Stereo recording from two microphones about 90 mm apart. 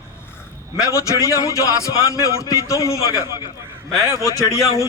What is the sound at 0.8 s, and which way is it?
A man's voice, 35° left (ahead or behind).